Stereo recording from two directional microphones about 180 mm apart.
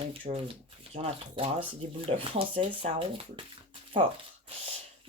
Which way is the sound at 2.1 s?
30° right (ahead or behind).